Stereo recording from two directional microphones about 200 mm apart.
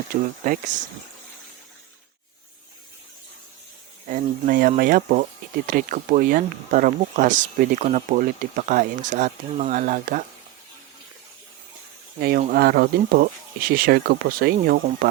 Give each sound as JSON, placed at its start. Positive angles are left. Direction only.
{"t": 0.1, "sound": "speech", "side_deg": -45}
{"t": 4.1, "sound": "speech", "side_deg": -45}
{"t": 12.4, "sound": "speech", "side_deg": -45}